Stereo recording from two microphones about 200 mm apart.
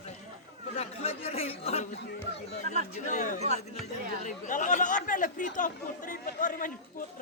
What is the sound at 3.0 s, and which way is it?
Speech, 40° left (ahead or behind).